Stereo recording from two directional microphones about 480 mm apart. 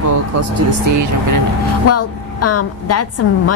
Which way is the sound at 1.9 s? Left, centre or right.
Left.